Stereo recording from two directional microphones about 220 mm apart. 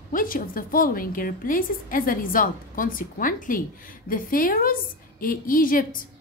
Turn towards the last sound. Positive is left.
turn(degrees=40)  # may be behind; listen again after turning